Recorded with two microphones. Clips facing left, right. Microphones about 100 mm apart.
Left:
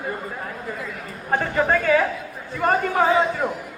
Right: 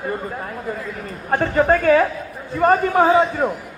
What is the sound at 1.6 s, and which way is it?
A man's voice, 40° right (ahead or behind).